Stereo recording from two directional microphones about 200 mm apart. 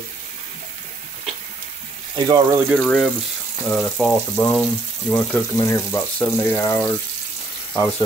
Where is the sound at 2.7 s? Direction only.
5° left (ahead or behind).